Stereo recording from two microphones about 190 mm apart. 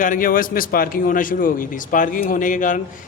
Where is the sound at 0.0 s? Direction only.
45° left (ahead or behind).